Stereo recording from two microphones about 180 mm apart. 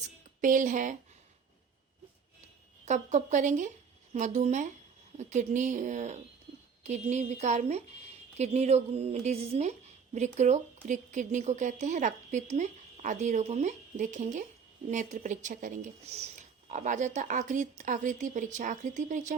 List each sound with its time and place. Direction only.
0.4 s speech: 45° right (ahead or behind)
2.8 s speech: 40° right (ahead or behind)